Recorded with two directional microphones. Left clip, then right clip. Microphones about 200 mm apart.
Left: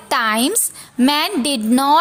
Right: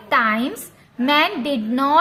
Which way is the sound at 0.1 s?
60° left (ahead or behind).